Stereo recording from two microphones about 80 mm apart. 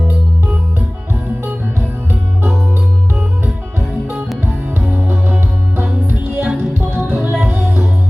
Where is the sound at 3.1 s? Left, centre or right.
Centre.